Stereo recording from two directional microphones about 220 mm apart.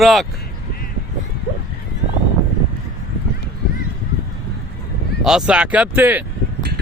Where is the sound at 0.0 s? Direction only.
Centre (ahead or behind).